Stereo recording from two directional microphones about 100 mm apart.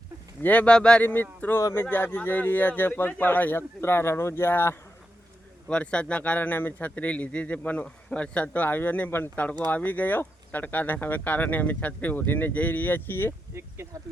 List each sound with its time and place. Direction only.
0.4 s a man's voice: 15° left (ahead or behind)
5.6 s a man's voice: 10° left (ahead or behind)
13.5 s speech: 25° right (ahead or behind)